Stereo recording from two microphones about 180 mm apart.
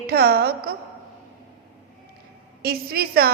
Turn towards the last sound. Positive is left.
turn(degrees=-60)  # may be behind; listen again after turning